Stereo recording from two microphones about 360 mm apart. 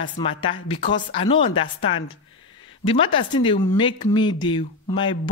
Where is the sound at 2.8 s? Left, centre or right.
Centre.